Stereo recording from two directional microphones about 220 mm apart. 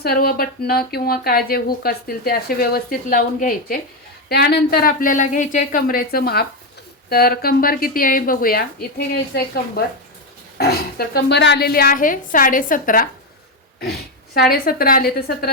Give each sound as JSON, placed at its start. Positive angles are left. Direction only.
{"t": 0.0, "sound": "speech", "side_deg": 45}
{"t": 14.3, "sound": "speech", "side_deg": 45}